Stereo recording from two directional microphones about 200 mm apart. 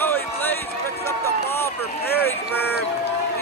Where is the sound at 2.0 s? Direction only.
55° left (ahead or behind).